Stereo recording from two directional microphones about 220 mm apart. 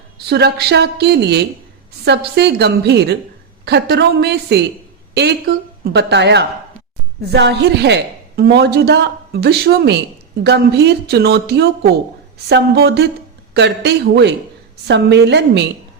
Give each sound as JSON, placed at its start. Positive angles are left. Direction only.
{"t": 0.3, "sound": "a woman's voice", "side_deg": -50}
{"t": 5.8, "sound": "a woman's voice", "side_deg": -50}